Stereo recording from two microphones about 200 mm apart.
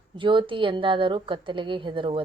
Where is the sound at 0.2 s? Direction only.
25° right (ahead or behind).